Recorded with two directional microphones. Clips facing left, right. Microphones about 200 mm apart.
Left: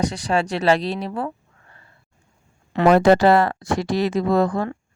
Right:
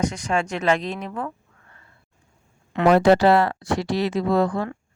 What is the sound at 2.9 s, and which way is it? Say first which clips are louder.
Speech: left 1 dB; 50° left (ahead or behind).